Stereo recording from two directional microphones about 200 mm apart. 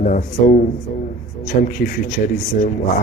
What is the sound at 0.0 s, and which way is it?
Speech, 40° left (ahead or behind).